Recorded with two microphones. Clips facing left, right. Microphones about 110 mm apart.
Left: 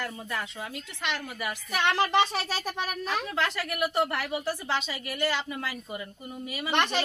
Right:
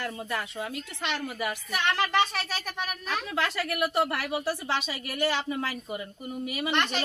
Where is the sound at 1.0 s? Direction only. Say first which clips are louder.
Right 2 dB; 15° right (ahead or behind).